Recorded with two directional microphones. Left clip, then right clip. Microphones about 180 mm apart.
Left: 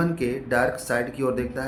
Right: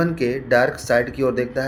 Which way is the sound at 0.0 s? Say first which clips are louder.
Right 5 dB; 25° right (ahead or behind).